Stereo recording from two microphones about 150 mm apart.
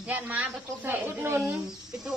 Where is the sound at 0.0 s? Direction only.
10° right (ahead or behind).